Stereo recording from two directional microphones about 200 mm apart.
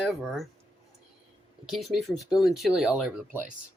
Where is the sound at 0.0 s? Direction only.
Centre (ahead or behind).